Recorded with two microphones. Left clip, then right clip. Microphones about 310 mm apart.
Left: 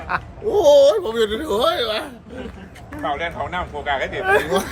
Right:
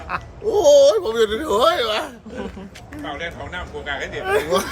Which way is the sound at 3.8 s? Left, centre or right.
Centre.